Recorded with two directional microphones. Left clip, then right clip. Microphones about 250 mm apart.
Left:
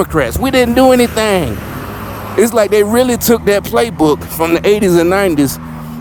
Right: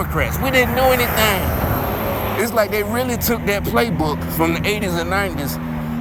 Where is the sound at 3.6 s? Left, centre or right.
Left.